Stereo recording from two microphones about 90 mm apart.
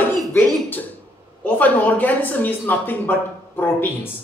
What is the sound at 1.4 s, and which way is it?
Speech, 20° left (ahead or behind).